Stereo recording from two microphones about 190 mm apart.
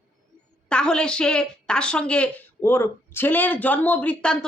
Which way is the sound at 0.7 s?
5° left (ahead or behind).